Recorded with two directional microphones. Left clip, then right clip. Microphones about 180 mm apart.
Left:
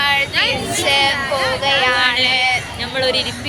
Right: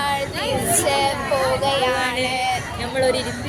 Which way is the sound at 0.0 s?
25° right (ahead or behind).